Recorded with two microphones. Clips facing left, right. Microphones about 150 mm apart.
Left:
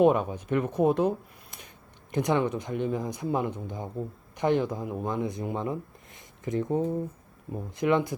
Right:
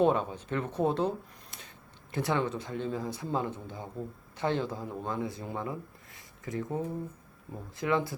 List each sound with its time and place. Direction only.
0.0 s speech: 15° left (ahead or behind)
2.1 s speech: 15° left (ahead or behind)